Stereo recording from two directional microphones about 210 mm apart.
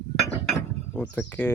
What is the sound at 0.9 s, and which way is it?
Speech, 10° left (ahead or behind).